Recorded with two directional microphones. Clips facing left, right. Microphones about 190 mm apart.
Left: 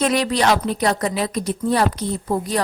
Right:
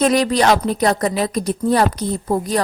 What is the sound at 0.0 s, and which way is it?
A woman's voice, 40° right (ahead or behind).